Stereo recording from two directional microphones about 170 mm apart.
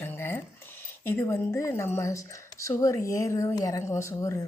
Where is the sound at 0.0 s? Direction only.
15° left (ahead or behind).